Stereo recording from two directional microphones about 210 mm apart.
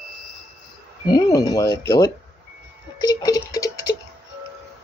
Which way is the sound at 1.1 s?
20° left (ahead or behind).